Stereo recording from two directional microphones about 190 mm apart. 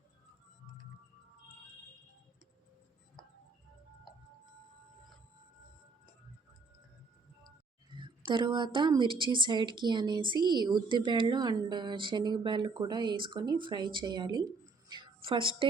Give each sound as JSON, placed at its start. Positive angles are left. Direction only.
{"t": 3.2, "sound": "music", "side_deg": 0}
{"t": 7.9, "sound": "a woman's voice", "side_deg": -25}